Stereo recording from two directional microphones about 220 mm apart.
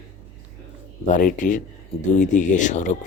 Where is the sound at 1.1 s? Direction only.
35° left (ahead or behind).